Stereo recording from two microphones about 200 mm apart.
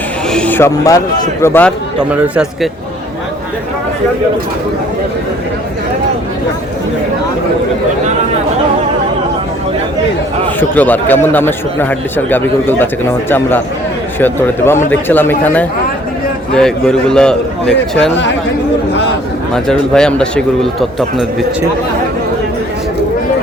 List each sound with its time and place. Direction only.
0.3 s speech: 10° left (ahead or behind)
2.0 s speech: 5° right (ahead or behind)
10.6 s speech: 10° left (ahead or behind)
14.2 s speech: 10° left (ahead or behind)
19.5 s speech: 5° left (ahead or behind)